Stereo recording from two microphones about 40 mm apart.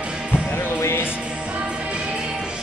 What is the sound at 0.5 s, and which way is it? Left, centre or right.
Music, left.